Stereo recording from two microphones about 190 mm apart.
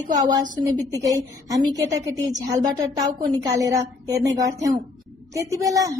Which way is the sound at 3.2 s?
15° right (ahead or behind).